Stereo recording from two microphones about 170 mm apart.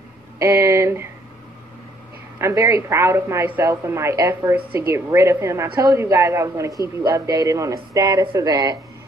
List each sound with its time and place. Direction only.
0.4 s a woman's voice: 15° right (ahead or behind)
2.3 s a woman's voice: 15° right (ahead or behind)